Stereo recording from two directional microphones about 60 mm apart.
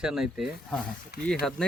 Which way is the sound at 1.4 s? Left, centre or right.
Centre.